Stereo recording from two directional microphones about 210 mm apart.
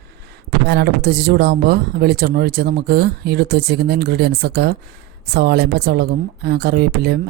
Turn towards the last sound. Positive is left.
turn(degrees=-50)  # may be behind; listen again after turning